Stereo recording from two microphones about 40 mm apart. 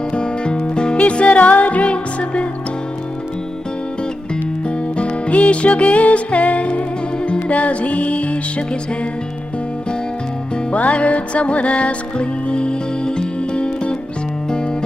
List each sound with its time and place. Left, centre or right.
0.1 s music: left
4.6 s music: left
10.7 s music: left